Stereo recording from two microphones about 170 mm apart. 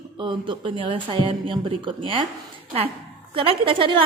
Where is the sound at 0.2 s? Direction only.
30° right (ahead or behind).